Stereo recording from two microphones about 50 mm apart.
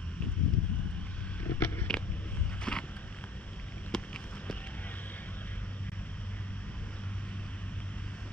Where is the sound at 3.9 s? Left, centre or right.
Centre.